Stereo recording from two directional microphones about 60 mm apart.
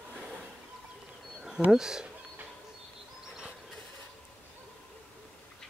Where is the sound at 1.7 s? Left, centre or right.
Centre.